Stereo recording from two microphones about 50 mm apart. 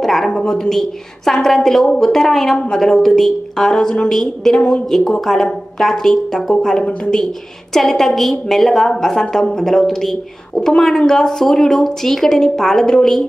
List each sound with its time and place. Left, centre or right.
0.0 s a sound: centre
0.5 s a woman's voice: centre
4.6 s a woman's voice: centre
5.2 s a woman's voice: centre